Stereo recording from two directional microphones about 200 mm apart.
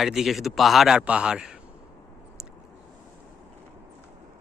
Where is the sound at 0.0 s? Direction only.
Centre (ahead or behind).